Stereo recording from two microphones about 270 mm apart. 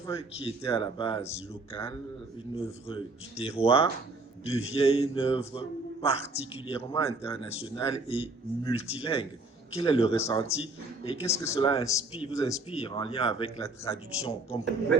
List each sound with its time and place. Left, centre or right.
0.0 s a man's voice: centre
10.4 s a man's voice: left
11.3 s a man's voice: centre